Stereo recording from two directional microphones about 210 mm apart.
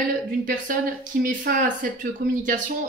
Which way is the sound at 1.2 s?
40° right (ahead or behind).